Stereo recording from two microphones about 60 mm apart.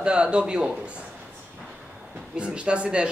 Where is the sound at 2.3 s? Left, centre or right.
Centre.